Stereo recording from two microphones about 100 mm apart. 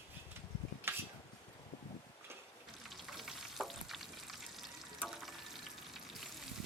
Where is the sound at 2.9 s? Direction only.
Centre (ahead or behind).